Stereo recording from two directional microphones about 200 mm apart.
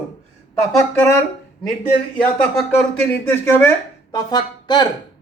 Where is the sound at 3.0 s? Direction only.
10° left (ahead or behind).